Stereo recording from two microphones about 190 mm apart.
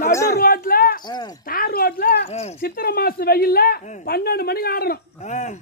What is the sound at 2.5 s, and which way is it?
Speech, 50° left (ahead or behind).